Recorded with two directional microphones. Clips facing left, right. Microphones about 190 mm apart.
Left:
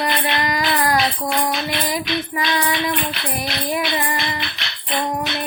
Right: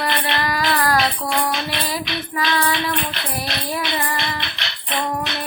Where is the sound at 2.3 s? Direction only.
15° left (ahead or behind).